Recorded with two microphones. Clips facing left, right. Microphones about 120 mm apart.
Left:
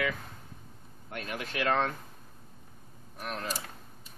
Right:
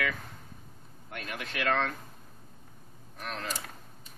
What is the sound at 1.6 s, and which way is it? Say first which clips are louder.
Speech: left 1 dB; 15° left (ahead or behind).